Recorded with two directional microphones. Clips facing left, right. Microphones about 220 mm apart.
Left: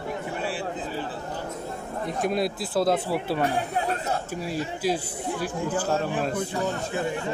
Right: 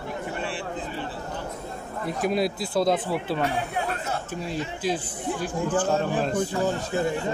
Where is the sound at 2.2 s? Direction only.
Centre (ahead or behind).